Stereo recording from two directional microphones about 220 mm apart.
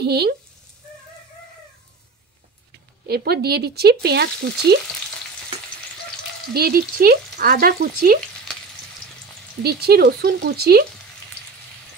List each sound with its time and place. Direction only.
0.0 s speech: 45° right (ahead or behind)
3.1 s speech: 45° right (ahead or behind)
6.5 s speech: 45° right (ahead or behind)
9.6 s speech: 45° right (ahead or behind)